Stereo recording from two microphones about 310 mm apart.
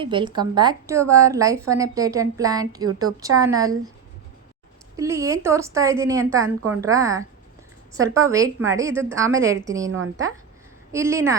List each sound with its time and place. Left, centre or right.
0.0 s a woman's voice: centre
4.9 s a woman's voice: centre
9.8 s a woman's voice: right
10.9 s a woman's voice: centre